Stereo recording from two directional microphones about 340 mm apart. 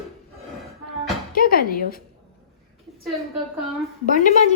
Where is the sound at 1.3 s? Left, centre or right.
Left.